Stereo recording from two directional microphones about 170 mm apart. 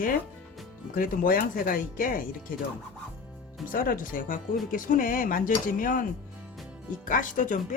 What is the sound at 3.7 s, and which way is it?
Speech, 55° left (ahead or behind).